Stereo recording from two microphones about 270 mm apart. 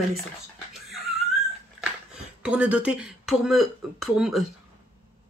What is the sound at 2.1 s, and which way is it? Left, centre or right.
Speech, centre.